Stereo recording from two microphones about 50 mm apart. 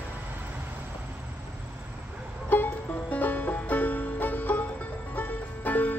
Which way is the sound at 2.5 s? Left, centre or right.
Left.